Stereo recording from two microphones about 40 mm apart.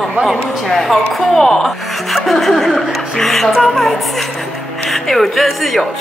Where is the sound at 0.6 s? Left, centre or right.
Centre.